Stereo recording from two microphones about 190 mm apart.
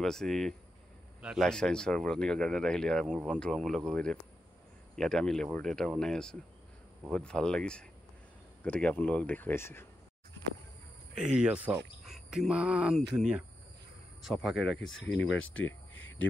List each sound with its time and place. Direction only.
0.0 s speech: 5° left (ahead or behind)
11.1 s speech: 5° right (ahead or behind)
14.6 s speech: 80° left